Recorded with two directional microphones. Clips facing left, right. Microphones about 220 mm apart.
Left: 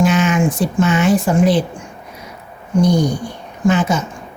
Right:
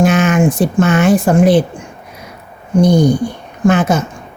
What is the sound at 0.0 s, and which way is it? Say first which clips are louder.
Speech: right 3 dB; 50° right (ahead or behind).